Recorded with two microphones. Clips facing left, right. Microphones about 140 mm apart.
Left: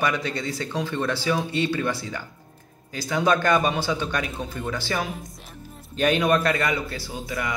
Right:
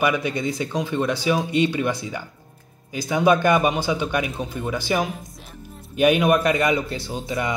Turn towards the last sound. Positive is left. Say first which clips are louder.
# right 4 dB
turn(degrees=-25)  # may be behind; listen again after turning